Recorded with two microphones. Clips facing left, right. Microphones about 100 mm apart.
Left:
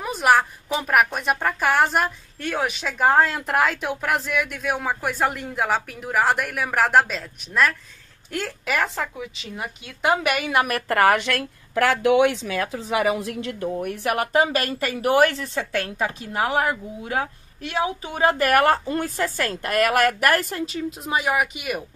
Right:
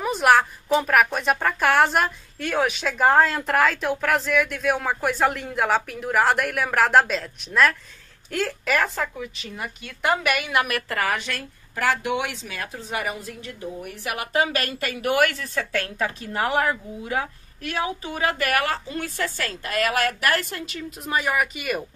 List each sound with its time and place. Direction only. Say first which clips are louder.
0.0 s a woman's voice: right 1 dB; centre (ahead or behind)
9.0 s a woman's voice: right 1 dB; 15° left (ahead or behind); by 10.8 s 35° left (ahead or behind)
10.9 s a woman's voice: left 7 dB; 60° left (ahead or behind)
12.7 s speech: left 6 dB; 90° left
13.7 s speech: left 8 dB; 60° left (ahead or behind)
14.2 s a woman's voice: left 1 dB; 35° left (ahead or behind); by 17.3 s 10° left (ahead or behind)
17.6 s a woman's voice: left 2 dB; 20° left (ahead or behind)
18.5 s a woman's voice: left 6 dB; 45° left (ahead or behind)
21.0 s a woman's voice: even; 15° left (ahead or behind)